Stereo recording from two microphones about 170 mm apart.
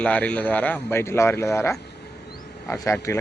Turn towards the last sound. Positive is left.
turn(degrees=15)  # may be behind; listen again after turning